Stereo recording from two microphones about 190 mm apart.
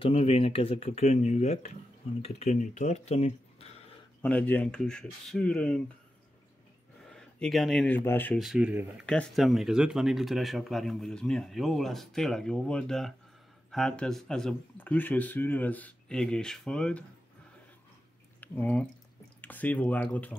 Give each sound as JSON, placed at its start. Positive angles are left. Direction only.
{"t": 0.0, "sound": "speech", "side_deg": 30}
{"t": 4.2, "sound": "speech", "side_deg": 5}
{"t": 7.1, "sound": "speech", "side_deg": 0}
{"t": 8.4, "sound": "speech", "side_deg": -5}
{"t": 9.0, "sound": "speech", "side_deg": 5}
{"t": 18.4, "sound": "speech", "side_deg": 10}